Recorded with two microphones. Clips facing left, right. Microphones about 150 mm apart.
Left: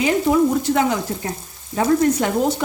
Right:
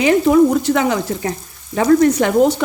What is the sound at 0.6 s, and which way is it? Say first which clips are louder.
Speech: right 2 dB; 90° right.